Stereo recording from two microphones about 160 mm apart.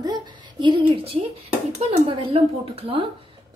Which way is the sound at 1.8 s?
40° right (ahead or behind).